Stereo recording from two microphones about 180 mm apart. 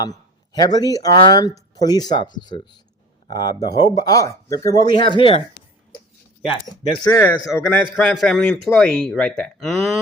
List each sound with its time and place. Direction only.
0.0 s speech: 20° left (ahead or behind)
6.4 s speech: 30° left (ahead or behind)
7.6 s a man's voice: centre (ahead or behind)